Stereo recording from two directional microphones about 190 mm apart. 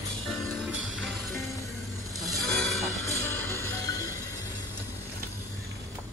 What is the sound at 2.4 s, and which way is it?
Music, 5° left (ahead or behind).